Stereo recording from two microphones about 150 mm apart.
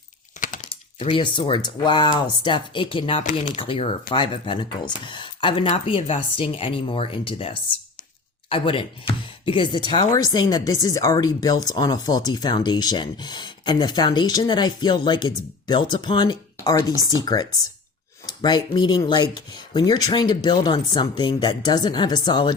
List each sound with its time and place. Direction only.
0.3 s computer keyboard: 60° left (ahead or behind)
0.9 s speech: 35° left (ahead or behind)